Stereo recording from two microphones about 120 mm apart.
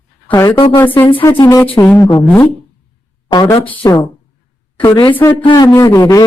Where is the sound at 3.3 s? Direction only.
35° left (ahead or behind).